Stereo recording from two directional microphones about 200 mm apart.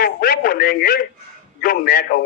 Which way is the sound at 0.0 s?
50° left (ahead or behind).